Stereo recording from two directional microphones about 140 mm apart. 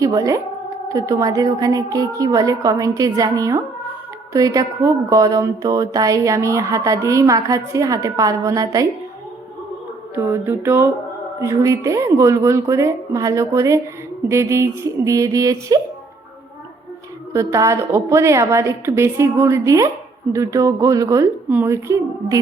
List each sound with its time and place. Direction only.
0.0 s a woman's voice: 25° right (ahead or behind)
10.2 s music: 15° right (ahead or behind)
11.3 s a woman's voice: 20° right (ahead or behind)
17.3 s a woman's voice: 20° right (ahead or behind)